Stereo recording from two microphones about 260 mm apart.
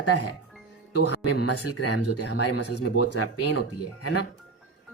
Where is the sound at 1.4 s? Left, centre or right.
Left.